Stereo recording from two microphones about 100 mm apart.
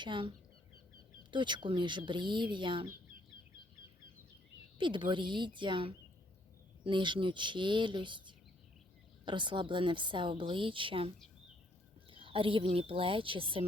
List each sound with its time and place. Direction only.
0.0 s a woman's voice: 55° right (ahead or behind)
4.8 s speech: 55° right (ahead or behind)
9.2 s a woman's voice: 50° right (ahead or behind)
12.1 s a woman's voice: 65° right (ahead or behind)